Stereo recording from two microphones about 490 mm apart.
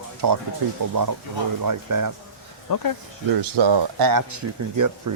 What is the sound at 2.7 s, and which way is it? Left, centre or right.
Speech, left.